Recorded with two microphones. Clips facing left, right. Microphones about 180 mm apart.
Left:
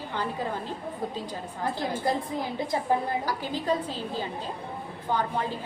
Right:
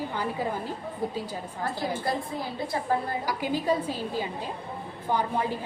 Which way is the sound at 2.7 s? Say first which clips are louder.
Left 2 dB; 20° left (ahead or behind).